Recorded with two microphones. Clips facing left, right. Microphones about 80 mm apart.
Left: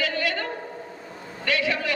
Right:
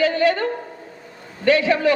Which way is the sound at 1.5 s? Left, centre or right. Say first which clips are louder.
Right 9 dB; right.